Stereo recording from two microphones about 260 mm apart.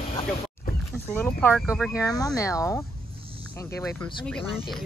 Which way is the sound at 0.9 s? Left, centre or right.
Centre.